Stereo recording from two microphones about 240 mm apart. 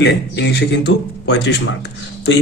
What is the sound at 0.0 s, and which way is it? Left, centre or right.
Speech, left.